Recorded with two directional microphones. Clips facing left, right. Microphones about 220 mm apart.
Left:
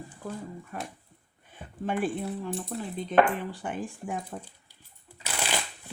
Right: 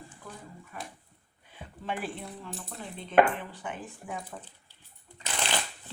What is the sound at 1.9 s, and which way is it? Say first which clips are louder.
Speech: left 6 dB; 45° left (ahead or behind).